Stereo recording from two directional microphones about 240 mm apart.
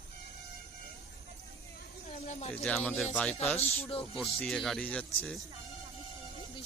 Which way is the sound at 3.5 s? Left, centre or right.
Left.